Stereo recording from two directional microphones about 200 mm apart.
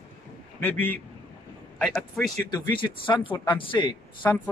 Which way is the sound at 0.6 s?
10° left (ahead or behind).